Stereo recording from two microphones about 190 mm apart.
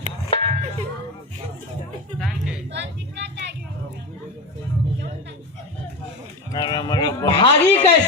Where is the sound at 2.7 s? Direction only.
65° right (ahead or behind).